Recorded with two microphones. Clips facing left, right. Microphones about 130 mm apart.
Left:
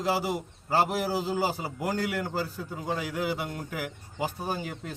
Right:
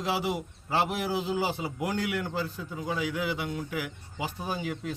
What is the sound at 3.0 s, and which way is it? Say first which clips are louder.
Speech: right 1 dB; 45° left (ahead or behind).